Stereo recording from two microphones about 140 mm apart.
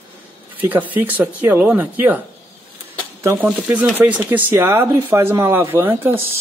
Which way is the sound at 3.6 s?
10° right (ahead or behind).